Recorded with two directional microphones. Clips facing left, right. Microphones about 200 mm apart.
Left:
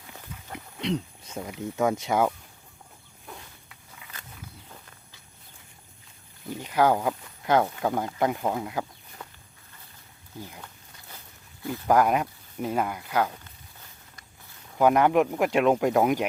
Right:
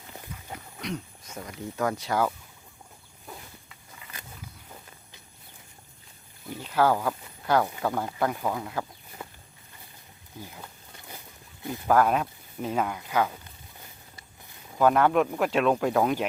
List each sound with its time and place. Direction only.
0.8 s wild animals: 30° left (ahead or behind)
1.4 s speech: 15° left (ahead or behind)
3.2 s a sound: centre (ahead or behind)
6.6 s speech: 15° left (ahead or behind)
9.2 s walk: 10° right (ahead or behind)
11.9 s speech: 15° left (ahead or behind)
14.8 s speech: 15° left (ahead or behind)